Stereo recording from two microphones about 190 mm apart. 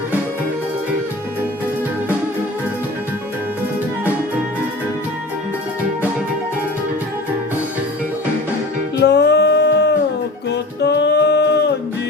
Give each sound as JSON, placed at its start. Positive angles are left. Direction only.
{"t": 9.0, "sound": "music", "side_deg": 60}